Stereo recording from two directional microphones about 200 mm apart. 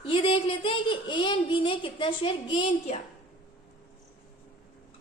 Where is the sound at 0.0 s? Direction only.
25° left (ahead or behind).